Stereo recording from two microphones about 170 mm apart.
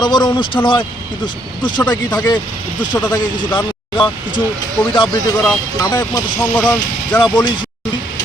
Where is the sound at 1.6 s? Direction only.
25° left (ahead or behind).